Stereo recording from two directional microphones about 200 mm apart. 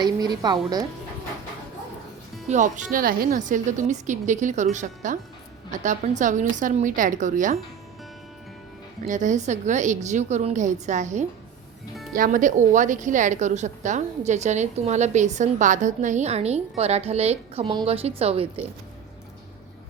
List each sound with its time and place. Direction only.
0.0 s a woman's voice: 20° right (ahead or behind)
2.5 s a woman's voice: 40° right (ahead or behind)
9.0 s a woman's voice: 40° right (ahead or behind)